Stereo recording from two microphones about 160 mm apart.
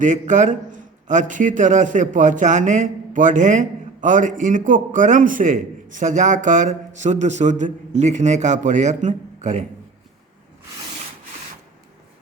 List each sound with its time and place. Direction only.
0.0 s a man's voice: 50° right (ahead or behind)